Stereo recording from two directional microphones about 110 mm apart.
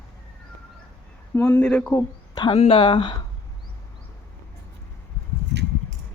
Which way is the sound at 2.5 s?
60° left (ahead or behind).